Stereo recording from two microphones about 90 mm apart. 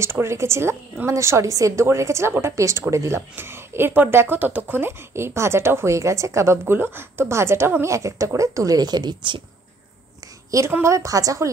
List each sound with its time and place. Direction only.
0.0 s a woman's voice: 30° right (ahead or behind); by 9.4 s 55° right (ahead or behind)
10.7 s a woman's voice: 35° right (ahead or behind)